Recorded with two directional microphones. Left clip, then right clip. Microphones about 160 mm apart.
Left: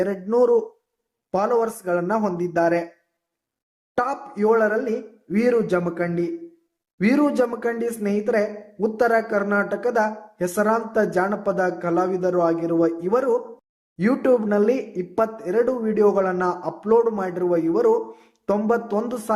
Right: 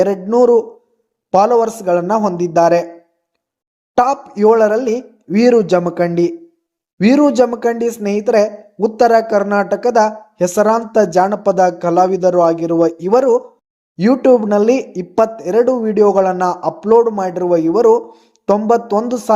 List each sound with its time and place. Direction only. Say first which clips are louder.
0.0 s a man's voice: right 8 dB; 30° right (ahead or behind)
3.9 s a woman's voice: right 10 dB; 35° right (ahead or behind)
7.0 s a woman's voice: right 9 dB; 30° right (ahead or behind)